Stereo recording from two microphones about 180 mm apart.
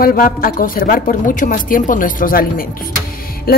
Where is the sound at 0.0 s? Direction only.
55° left (ahead or behind).